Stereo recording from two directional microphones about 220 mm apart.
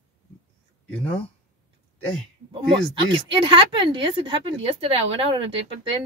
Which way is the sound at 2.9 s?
20° right (ahead or behind).